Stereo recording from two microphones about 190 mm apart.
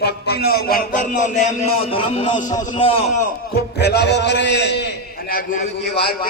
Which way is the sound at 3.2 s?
55° left (ahead or behind).